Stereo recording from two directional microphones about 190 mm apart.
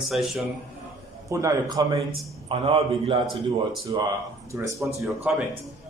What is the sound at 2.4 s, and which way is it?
A man's voice, 30° right (ahead or behind).